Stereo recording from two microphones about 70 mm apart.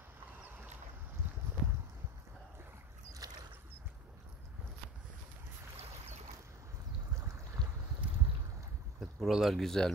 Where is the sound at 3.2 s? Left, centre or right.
Right.